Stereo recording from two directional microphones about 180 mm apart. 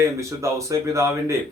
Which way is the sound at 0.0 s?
15° right (ahead or behind).